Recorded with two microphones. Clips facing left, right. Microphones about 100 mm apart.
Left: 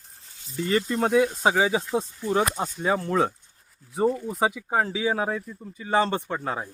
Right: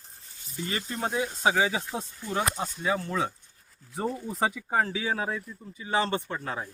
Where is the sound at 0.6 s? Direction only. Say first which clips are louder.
Left 9 dB; 55° left (ahead or behind).